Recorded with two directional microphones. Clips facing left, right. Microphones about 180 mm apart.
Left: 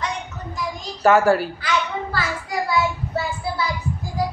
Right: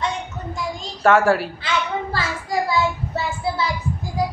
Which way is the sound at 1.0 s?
Centre (ahead or behind).